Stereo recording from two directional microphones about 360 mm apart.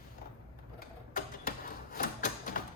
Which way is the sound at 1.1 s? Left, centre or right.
Left.